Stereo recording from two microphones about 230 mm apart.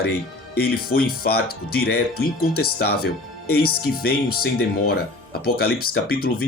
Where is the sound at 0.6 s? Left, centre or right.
Left.